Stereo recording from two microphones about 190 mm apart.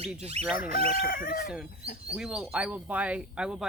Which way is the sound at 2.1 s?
5° right (ahead or behind).